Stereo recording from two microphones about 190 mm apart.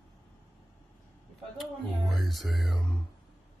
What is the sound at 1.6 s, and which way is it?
Music, centre (ahead or behind).